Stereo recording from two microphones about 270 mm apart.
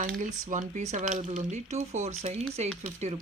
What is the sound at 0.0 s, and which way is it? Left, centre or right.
Speech, right.